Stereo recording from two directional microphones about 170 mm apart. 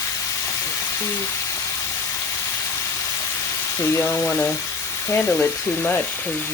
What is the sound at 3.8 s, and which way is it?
Speech, 15° left (ahead or behind).